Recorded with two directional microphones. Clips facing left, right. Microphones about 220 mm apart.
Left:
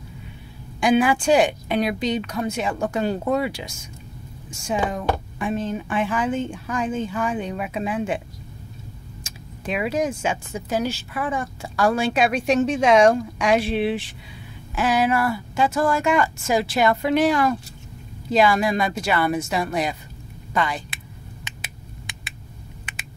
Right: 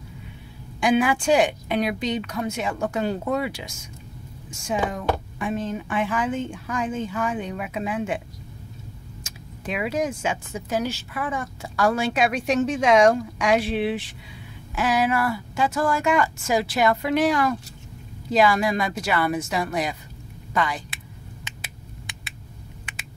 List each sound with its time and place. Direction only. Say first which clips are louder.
0.7 s speech: left 2 dB; 35° left (ahead or behind)
4.9 s speech: left 1 dB; 30° left (ahead or behind)
9.2 s speech: left 2 dB; 30° left (ahead or behind)
21.5 s a sound: left 1 dB; 15° left (ahead or behind)